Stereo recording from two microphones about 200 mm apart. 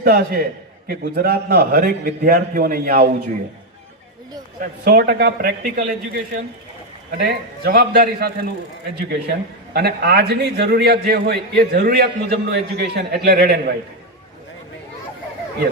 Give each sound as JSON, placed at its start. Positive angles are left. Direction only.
{"t": 0.0, "sound": "a man's voice", "side_deg": -50}
{"t": 4.9, "sound": "a man's voice", "side_deg": -50}
{"t": 7.3, "sound": "a man's voice", "side_deg": -50}